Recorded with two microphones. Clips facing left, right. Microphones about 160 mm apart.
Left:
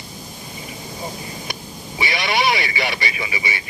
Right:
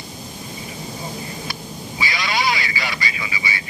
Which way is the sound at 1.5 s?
20° left (ahead or behind).